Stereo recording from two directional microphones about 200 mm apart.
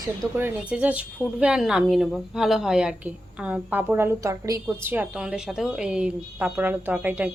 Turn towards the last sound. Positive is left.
turn(degrees=-5)  # may be behind; listen again after turning